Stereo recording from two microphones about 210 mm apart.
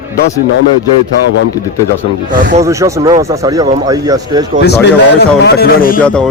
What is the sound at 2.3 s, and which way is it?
Speech, 40° right (ahead or behind).